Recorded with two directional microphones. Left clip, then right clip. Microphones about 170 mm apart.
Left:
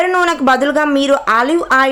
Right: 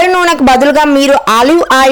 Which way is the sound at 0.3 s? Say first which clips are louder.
Right 6 dB; 40° right (ahead or behind).